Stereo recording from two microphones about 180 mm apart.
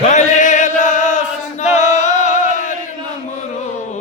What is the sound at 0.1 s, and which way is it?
Chant, 40° left (ahead or behind).